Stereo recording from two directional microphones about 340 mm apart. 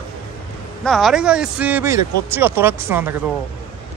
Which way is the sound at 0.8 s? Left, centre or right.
Centre.